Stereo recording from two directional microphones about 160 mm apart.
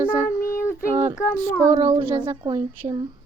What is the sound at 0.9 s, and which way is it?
Speech, 35° right (ahead or behind).